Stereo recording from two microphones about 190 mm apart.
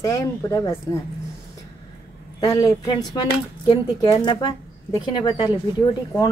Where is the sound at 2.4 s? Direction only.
20° left (ahead or behind).